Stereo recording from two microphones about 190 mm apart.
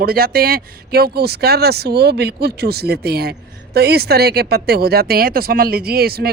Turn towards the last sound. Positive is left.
turn(degrees=-55)  # may be behind; listen again after turning